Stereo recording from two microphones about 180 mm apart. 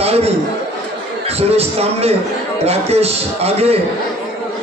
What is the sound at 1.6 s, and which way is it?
A man's voice, 35° right (ahead or behind).